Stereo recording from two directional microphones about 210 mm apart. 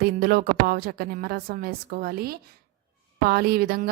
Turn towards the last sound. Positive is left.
turn(degrees=-50)  # may be behind; listen again after turning